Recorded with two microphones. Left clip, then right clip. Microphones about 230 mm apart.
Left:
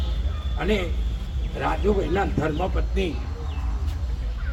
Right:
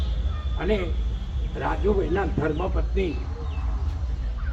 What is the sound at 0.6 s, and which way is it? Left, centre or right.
Speech, left.